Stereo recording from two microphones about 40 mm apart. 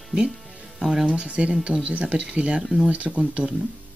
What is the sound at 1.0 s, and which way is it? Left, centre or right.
Speech, right.